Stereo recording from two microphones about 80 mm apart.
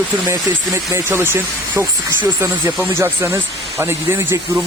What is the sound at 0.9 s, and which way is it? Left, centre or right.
Speech, right.